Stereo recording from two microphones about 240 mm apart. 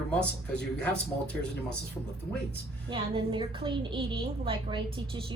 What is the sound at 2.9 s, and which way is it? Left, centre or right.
A woman's voice, right.